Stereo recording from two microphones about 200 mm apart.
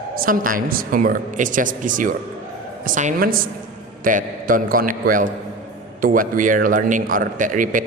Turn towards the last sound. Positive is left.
turn(degrees=-40)  # may be behind; listen again after turning